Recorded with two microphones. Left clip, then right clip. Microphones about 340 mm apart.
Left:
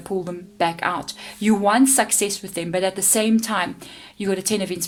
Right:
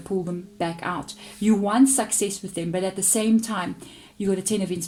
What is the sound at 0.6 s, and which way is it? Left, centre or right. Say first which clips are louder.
Speech: left 7 dB; left.